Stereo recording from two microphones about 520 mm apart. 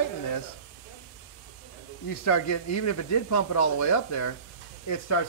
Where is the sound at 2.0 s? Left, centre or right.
Left.